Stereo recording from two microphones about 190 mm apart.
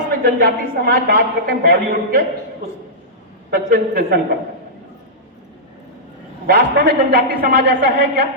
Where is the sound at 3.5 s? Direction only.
50° right (ahead or behind).